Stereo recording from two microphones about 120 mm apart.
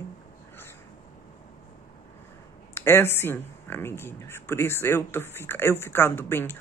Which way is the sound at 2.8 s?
20° left (ahead or behind).